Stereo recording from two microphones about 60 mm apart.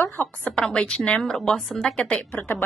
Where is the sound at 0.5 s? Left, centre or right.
Centre.